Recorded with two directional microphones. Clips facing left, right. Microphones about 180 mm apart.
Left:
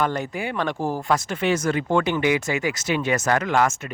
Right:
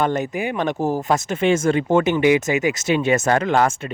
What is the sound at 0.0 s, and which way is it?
Speech, 20° right (ahead or behind).